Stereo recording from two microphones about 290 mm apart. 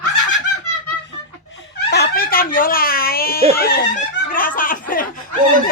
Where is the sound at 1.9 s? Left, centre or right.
Left.